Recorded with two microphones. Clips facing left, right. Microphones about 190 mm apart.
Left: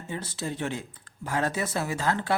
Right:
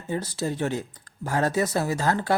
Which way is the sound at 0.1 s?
40° right (ahead or behind).